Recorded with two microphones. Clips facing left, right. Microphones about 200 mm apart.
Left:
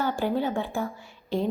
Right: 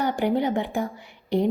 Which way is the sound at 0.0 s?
15° right (ahead or behind).